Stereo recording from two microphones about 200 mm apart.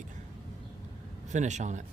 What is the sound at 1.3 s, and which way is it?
Speech, 35° right (ahead or behind).